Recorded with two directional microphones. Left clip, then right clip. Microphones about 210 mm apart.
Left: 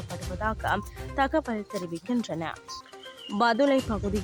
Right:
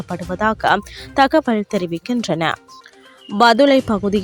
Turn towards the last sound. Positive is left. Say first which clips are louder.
# right 11 dB
turn(degrees=-35)  # may be behind; listen again after turning